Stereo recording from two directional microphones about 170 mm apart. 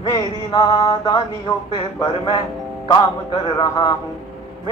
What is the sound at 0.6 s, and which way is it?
Mantra, 35° left (ahead or behind).